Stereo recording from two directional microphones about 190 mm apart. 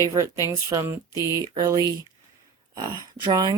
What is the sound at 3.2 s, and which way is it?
Speech, 20° right (ahead or behind).